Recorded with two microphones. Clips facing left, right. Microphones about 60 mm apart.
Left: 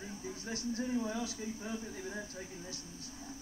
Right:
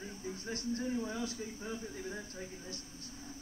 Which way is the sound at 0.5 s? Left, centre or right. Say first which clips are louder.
Even; right.